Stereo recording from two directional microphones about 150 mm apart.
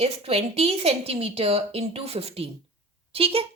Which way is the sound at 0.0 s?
40° right (ahead or behind).